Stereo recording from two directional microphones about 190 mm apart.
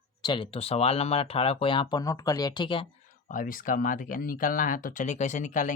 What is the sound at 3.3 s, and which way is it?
Speech, 45° left (ahead or behind).